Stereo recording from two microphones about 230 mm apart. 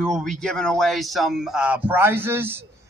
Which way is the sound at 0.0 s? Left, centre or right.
Centre.